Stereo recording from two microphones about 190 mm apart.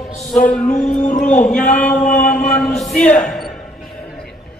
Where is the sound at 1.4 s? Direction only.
5° left (ahead or behind).